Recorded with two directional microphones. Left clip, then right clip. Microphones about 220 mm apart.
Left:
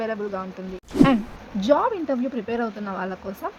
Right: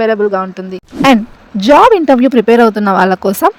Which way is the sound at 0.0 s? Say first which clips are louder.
Right 16 dB; 40° right (ahead or behind).